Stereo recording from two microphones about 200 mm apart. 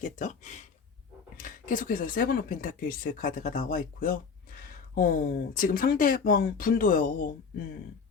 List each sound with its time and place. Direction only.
0.0 s speech: 35° left (ahead or behind)